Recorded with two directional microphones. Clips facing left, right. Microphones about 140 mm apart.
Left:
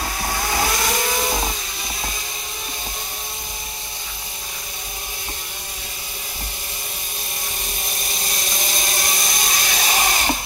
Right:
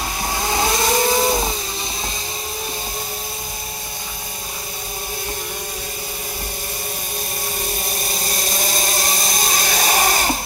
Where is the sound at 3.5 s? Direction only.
35° right (ahead or behind).